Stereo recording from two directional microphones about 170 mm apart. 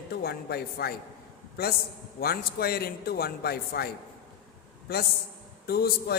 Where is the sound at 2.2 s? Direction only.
65° left (ahead or behind).